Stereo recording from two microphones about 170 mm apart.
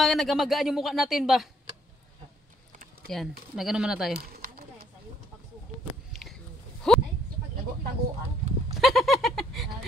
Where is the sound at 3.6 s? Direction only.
5° right (ahead or behind).